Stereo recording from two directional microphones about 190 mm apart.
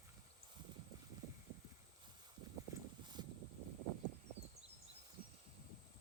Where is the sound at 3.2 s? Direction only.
25° right (ahead or behind).